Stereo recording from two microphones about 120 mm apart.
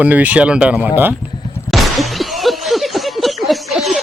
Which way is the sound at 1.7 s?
Centre (ahead or behind).